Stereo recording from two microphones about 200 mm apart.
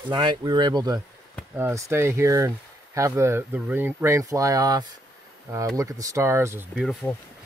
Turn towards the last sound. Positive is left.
turn(degrees=-10)  # may be behind; listen again after turning